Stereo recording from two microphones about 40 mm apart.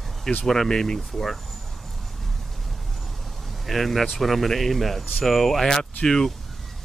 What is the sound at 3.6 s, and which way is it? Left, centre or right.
Speech, centre.